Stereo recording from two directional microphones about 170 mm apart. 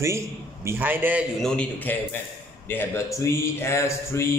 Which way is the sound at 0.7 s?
10° right (ahead or behind).